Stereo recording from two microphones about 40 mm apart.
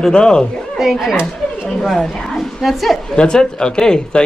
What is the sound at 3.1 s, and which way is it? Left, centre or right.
Speech, centre.